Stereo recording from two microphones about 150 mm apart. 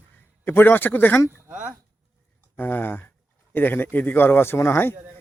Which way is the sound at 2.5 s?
15° left (ahead or behind).